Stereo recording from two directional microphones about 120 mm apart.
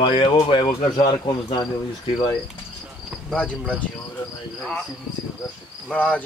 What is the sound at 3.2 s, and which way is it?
Speech, 5° left (ahead or behind).